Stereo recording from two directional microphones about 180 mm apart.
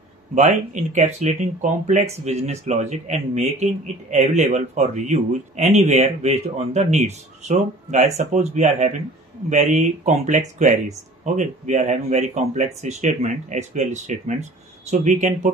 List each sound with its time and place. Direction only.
0.3 s speech: 45° right (ahead or behind)